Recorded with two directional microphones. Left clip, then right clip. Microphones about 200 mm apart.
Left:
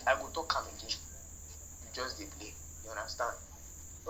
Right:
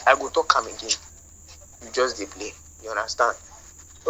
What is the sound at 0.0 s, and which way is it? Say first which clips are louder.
Speech: right 13 dB; 50° right (ahead or behind).